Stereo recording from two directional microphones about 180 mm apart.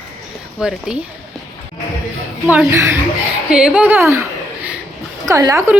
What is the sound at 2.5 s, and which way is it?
Speech, 10° right (ahead or behind).